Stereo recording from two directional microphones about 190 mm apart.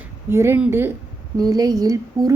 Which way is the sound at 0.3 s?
10° right (ahead or behind).